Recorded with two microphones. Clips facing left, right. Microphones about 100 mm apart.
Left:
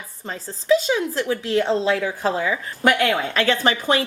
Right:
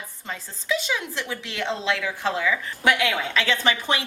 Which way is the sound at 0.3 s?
35° left (ahead or behind).